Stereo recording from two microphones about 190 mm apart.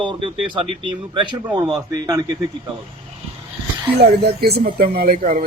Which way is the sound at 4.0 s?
60° right (ahead or behind).